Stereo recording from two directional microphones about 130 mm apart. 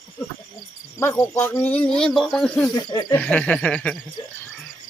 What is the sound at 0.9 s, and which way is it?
Speech, 20° left (ahead or behind).